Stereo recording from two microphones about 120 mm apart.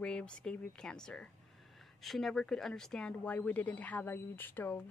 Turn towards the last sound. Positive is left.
turn(degrees=15)  # may be behind; listen again after turning